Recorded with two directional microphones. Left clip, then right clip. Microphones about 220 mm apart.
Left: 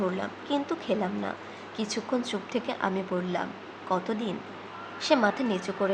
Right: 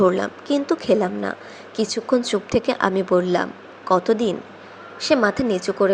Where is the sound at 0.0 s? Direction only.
30° right (ahead or behind).